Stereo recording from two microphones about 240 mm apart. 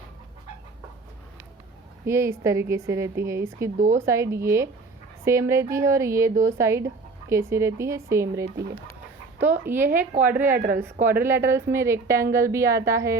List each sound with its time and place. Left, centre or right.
2.0 s a woman's voice: centre
10.5 s a woman's voice: right
11.0 s a woman's voice: centre